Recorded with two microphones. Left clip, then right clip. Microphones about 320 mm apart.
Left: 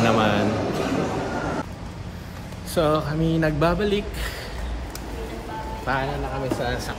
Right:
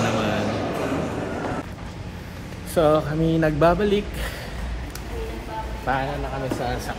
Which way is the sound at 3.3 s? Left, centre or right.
Right.